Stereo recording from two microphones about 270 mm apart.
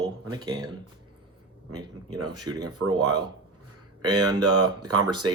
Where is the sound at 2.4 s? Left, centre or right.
Centre.